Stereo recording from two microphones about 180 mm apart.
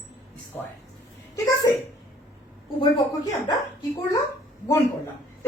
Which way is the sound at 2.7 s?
25° left (ahead or behind).